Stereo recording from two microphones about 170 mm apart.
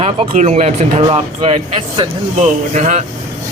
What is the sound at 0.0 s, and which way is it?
Speech, 40° right (ahead or behind).